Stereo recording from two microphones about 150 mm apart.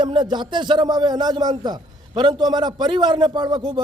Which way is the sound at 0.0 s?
30° right (ahead or behind).